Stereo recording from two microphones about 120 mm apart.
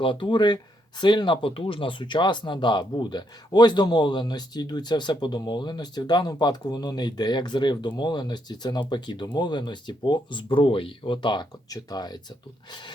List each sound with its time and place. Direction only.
0.0 s speech: 40° left (ahead or behind)